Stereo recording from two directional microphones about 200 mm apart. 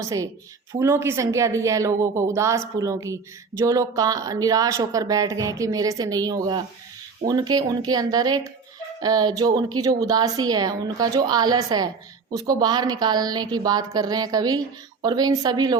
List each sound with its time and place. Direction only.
0.0 s a woman's voice: 15° right (ahead or behind)